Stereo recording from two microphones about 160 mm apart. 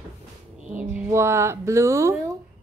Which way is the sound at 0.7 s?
10° right (ahead or behind).